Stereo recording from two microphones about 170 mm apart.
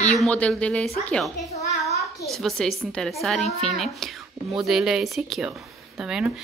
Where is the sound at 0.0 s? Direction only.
10° left (ahead or behind).